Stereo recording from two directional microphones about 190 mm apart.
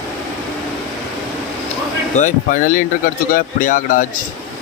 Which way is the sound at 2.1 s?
40° left (ahead or behind).